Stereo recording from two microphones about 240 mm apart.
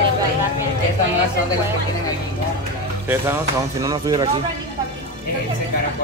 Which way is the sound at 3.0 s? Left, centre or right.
Centre.